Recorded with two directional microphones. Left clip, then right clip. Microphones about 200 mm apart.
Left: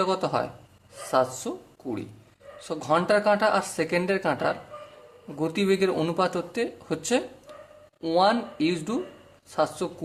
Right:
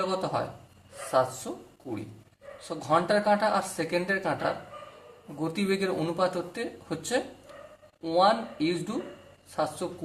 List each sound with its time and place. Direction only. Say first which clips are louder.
0.0 s speech: left 4 dB; 45° left (ahead or behind)
1.5 s speech: left 4 dB; 45° left (ahead or behind)